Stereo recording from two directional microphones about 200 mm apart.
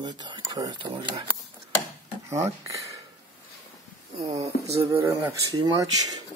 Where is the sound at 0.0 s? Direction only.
20° right (ahead or behind).